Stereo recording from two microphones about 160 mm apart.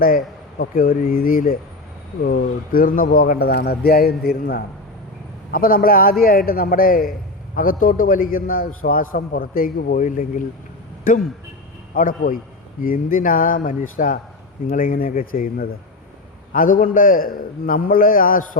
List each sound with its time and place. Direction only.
0.6 s a man's voice: 65° left (ahead or behind)